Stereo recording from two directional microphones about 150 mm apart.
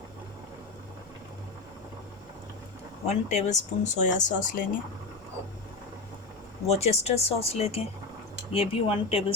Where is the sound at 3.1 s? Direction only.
50° left (ahead or behind).